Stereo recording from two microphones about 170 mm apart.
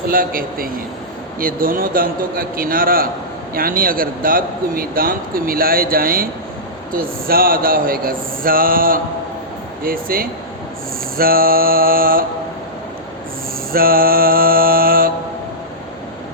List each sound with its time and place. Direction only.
0.1 s a man's voice: 55° right (ahead or behind)
13.7 s a man's voice: 60° right (ahead or behind)